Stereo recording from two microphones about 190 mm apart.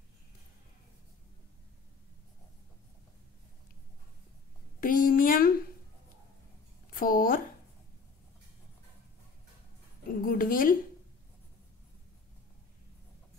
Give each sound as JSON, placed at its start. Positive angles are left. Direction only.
{"t": 4.7, "sound": "a sound", "side_deg": 45}
{"t": 6.9, "sound": "speech", "side_deg": 50}
{"t": 10.2, "sound": "speech", "side_deg": 45}